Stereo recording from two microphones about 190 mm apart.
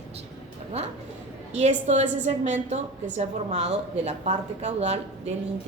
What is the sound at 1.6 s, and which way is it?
A woman's voice, 35° right (ahead or behind).